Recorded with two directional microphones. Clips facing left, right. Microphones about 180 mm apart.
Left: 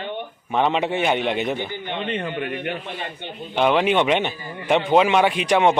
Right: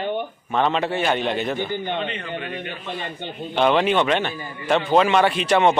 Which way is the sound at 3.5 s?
10° left (ahead or behind).